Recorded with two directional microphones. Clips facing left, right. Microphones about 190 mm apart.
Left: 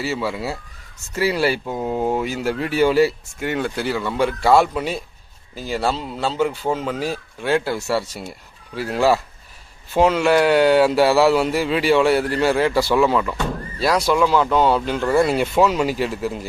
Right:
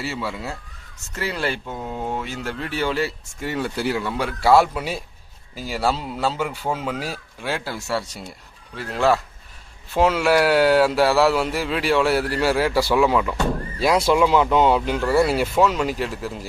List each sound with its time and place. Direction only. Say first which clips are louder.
0.0 s speech: left 4 dB; centre (ahead or behind)
3.5 s speech: left 1 dB; 5° right (ahead or behind)
14.8 s speech: left 1 dB; 5° right (ahead or behind)